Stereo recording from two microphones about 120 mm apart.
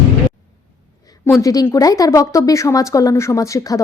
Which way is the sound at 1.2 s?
30° left (ahead or behind).